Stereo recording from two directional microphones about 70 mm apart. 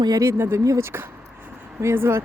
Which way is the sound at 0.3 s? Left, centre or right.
Right.